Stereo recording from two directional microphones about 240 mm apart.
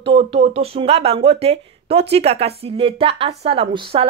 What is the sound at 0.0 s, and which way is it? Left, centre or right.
Speech, right.